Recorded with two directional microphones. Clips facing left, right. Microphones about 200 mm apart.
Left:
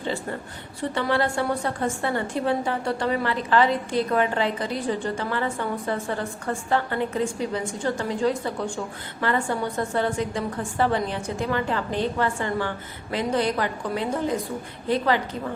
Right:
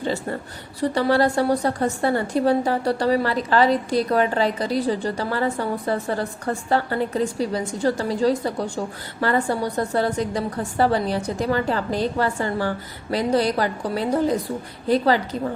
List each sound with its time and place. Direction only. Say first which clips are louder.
0.8 s a woman's voice: right 5 dB; 40° right (ahead or behind)